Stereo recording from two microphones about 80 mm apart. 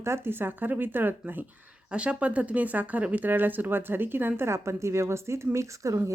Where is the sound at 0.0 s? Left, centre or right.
Right.